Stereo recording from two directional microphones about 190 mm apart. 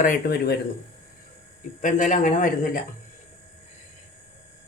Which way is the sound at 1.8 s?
40° left (ahead or behind).